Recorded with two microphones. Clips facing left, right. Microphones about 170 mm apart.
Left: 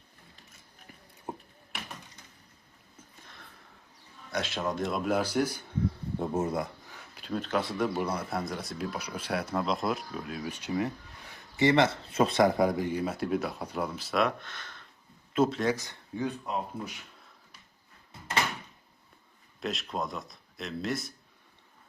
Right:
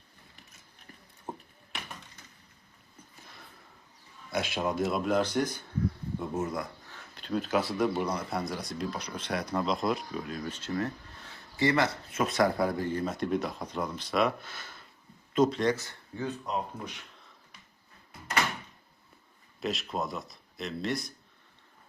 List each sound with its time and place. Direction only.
4.3 s speech: 10° right (ahead or behind); by 5.6 s 10° left (ahead or behind)
6.1 s speech: 30° left (ahead or behind)
6.9 s speech: 5° left (ahead or behind)
15.7 s speech: 15° left (ahead or behind)
19.5 s speech: centre (ahead or behind)